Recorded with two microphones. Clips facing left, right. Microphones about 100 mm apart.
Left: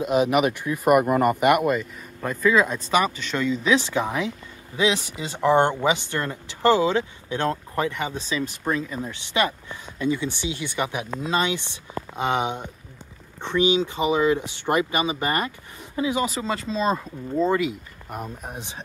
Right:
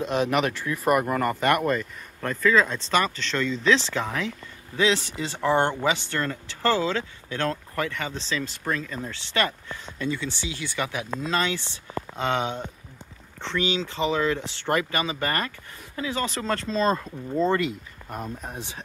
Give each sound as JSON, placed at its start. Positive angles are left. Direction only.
{"t": 0.0, "sound": "speech", "side_deg": 10}